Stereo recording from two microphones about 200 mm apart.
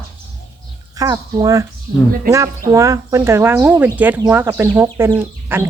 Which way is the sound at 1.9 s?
40° right (ahead or behind).